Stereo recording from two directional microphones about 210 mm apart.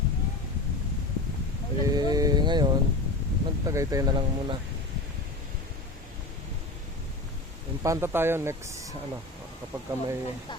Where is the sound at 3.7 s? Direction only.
15° right (ahead or behind).